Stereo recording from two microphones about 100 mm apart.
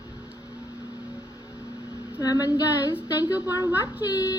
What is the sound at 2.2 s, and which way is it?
Female singing, 40° left (ahead or behind).